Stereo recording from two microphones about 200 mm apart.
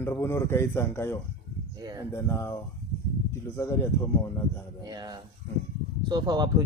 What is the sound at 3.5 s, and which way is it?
Speech, 15° left (ahead or behind).